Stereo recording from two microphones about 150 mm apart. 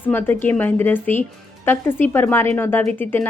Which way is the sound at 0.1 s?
15° left (ahead or behind).